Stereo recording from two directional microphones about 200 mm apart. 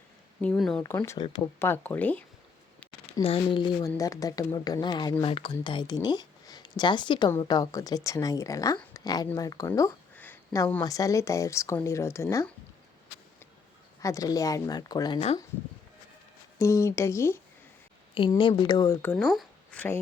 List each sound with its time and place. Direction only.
0.4 s speech: 5° left (ahead or behind)
0.8 s a woman's voice: 15° left (ahead or behind)
3.1 s a woman's voice: 30° left (ahead or behind); by 12.5 s 15° left (ahead or behind)
14.0 s speech: 15° left (ahead or behind)
16.6 s a woman's voice: 15° left (ahead or behind)
18.1 s speech: 25° left (ahead or behind)
19.1 s speech: centre (ahead or behind)